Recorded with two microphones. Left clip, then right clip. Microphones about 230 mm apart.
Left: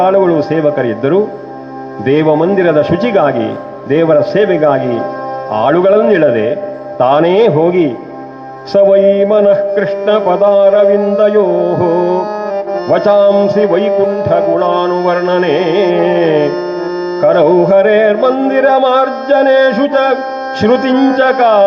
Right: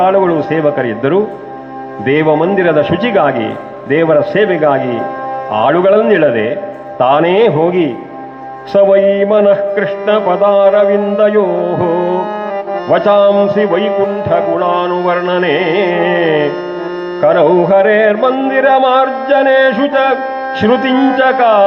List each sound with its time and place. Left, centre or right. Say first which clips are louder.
0.0 s speech: left 1 dB; left
2.0 s music: left 1 dB; left
7.0 s speech: even; left
9.0 s a sound: left 2 dB; centre
9.2 s music: left 1 dB; left